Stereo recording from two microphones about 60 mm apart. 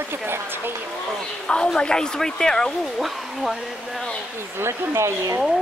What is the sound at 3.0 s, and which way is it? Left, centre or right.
Speech, centre.